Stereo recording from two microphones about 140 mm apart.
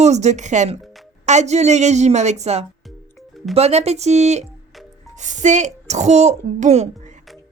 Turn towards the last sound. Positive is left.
turn(degrees=-55)  # may be behind; listen again after turning